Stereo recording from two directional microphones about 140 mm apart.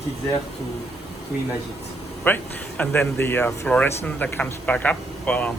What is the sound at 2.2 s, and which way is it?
Speech, 10° left (ahead or behind).